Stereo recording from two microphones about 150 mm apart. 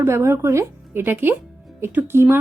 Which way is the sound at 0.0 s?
15° right (ahead or behind).